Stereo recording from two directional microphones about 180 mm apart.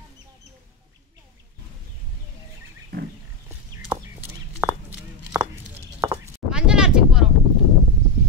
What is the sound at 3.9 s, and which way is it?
Bird, 10° right (ahead or behind).